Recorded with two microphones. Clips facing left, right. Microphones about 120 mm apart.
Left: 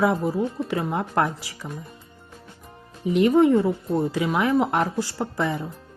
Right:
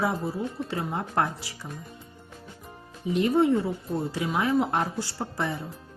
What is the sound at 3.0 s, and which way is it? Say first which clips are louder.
Speech: left 5 dB; 85° left.